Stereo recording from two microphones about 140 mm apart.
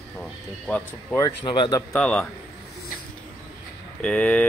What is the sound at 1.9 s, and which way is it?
Speech, 5° left (ahead or behind).